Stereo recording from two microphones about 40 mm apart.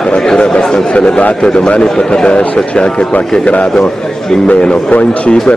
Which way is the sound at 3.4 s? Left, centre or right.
Left.